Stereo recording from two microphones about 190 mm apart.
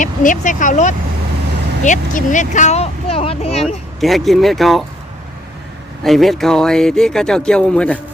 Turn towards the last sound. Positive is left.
turn(degrees=5)  # may be behind; listen again after turning